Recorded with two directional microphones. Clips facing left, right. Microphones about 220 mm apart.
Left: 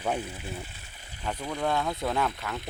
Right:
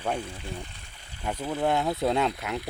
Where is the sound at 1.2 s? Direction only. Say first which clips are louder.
Right 3 dB; 10° right (ahead or behind).